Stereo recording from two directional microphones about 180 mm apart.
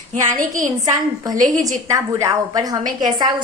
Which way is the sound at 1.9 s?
15° right (ahead or behind).